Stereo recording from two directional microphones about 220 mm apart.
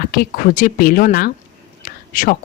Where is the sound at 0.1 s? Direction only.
40° left (ahead or behind).